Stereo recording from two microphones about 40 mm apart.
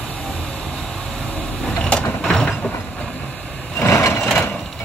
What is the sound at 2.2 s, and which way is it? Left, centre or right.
Vehicle, centre.